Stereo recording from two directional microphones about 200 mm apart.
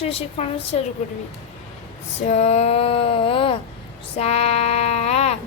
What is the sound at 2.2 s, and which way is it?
Female singing, 35° left (ahead or behind).